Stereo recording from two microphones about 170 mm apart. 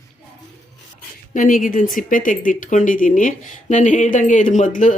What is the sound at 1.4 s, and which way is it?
Speech, 50° left (ahead or behind).